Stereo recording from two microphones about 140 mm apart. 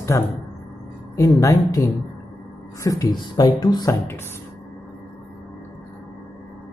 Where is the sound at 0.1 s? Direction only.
20° left (ahead or behind).